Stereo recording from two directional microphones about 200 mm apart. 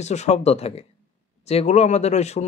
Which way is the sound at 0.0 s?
35° left (ahead or behind).